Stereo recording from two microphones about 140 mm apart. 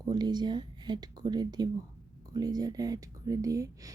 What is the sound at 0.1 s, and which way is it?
Speech, 30° right (ahead or behind).